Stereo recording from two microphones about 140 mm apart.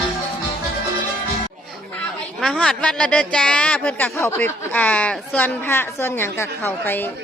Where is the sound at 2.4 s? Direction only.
5° left (ahead or behind).